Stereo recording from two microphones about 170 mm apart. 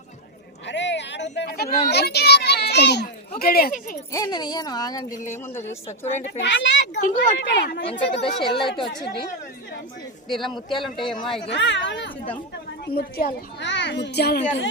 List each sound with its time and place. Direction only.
0.7 s a sound: 90° left
1.9 s a child's voice: 75° left (ahead or behind); by 3.9 s 55° left (ahead or behind)
4.1 s speech: 25° left (ahead or behind)
6.1 s speech: 45° left (ahead or behind)
6.4 s speech: 90° left
7.0 s speech: 45° left (ahead or behind)
7.3 s a child's voice: 75° left (ahead or behind)
8.2 s speech: 30° left (ahead or behind)
10.4 s speech: 30° left (ahead or behind)
11.1 s speech: 5° left (ahead or behind)
11.4 s speech: 90° left
12.8 s a child's voice: 65° left (ahead or behind)